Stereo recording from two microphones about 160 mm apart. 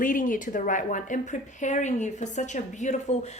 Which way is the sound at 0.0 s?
55° left (ahead or behind).